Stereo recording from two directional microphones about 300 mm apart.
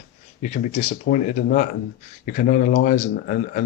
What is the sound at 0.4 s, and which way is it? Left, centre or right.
Speech, left.